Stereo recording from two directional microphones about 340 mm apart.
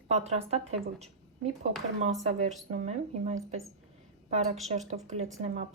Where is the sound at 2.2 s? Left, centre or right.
Centre.